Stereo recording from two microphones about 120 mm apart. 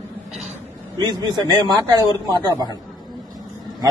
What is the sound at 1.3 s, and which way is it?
A man's voice, 35° right (ahead or behind).